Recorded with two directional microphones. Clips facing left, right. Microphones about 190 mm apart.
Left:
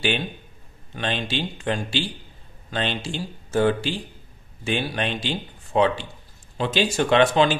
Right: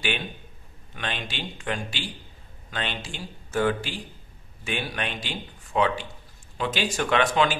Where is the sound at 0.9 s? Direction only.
30° left (ahead or behind).